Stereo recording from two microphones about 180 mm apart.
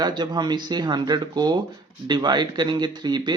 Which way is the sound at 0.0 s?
25° right (ahead or behind).